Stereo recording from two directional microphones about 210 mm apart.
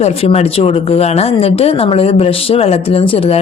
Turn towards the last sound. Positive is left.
turn(degrees=25)  # may be behind; listen again after turning